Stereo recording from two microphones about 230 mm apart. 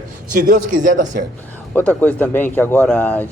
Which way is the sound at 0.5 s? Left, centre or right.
Right.